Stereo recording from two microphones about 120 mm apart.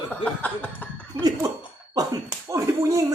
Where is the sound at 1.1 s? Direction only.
35° right (ahead or behind).